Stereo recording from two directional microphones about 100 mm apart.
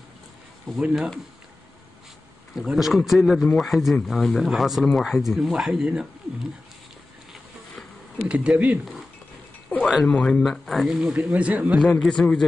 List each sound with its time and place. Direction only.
0.7 s speech: 5° left (ahead or behind)
2.5 s speech: 5° right (ahead or behind)
8.3 s speech: 15° right (ahead or behind)
9.7 s a sound: 15° left (ahead or behind)
10.0 s speech: 5° left (ahead or behind)
11.0 s speech: 10° right (ahead or behind)
11.8 s speech: 5° left (ahead or behind)